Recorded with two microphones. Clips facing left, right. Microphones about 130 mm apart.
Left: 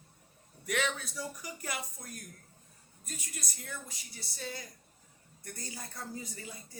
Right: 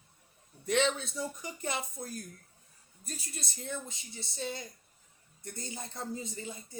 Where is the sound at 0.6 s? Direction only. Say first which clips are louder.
Right 5 dB; 25° right (ahead or behind).